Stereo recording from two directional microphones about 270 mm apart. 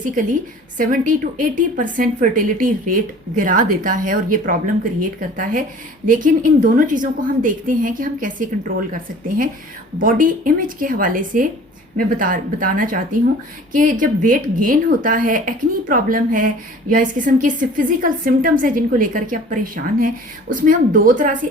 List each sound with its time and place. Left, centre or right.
0.0 s a woman's voice: right